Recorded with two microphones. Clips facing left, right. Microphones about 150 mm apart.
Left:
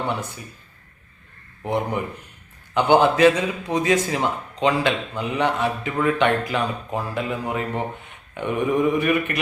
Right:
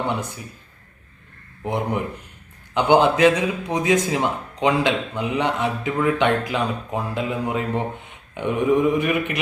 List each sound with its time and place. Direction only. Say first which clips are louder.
0.1 s a man's voice: right 1 dB; 15° right (ahead or behind)
1.6 s a man's voice: even; 15° right (ahead or behind)